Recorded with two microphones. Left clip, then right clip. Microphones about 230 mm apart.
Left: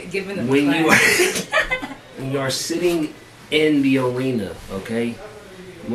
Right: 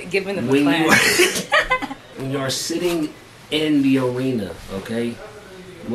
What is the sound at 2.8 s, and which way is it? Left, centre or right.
Speech, centre.